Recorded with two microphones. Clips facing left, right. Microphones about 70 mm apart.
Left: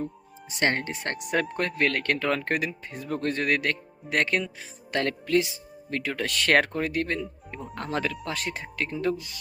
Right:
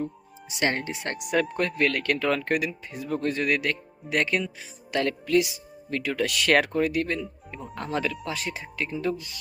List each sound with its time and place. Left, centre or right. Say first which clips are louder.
0.6 s speech: left 1 dB; left